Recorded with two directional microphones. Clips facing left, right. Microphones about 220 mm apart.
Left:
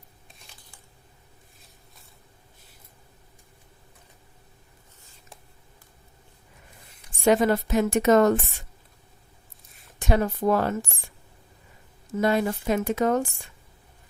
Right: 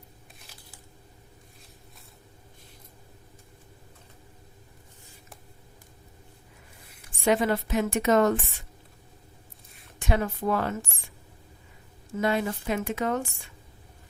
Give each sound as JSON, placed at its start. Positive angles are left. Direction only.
{"t": 0.5, "sound": "a sound", "side_deg": -5}
{"t": 7.3, "sound": "a woman's voice", "side_deg": 40}
{"t": 10.0, "sound": "a woman's voice", "side_deg": 40}
{"t": 12.2, "sound": "a woman's voice", "side_deg": 40}